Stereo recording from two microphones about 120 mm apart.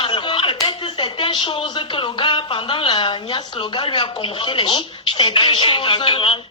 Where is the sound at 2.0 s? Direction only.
45° left (ahead or behind).